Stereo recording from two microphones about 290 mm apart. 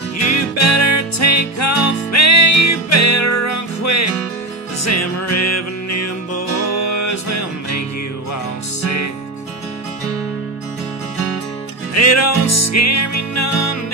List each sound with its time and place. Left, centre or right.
0.4 s music: left
11.9 s music: left